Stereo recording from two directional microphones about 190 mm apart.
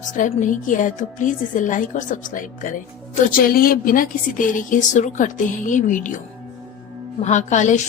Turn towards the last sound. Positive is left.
turn(degrees=40)  # may be behind; listen again after turning